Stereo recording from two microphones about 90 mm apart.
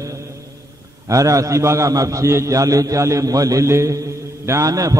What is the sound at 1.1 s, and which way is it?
A man's voice, 35° right (ahead or behind).